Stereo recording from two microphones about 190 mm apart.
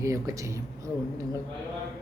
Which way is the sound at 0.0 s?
15° right (ahead or behind).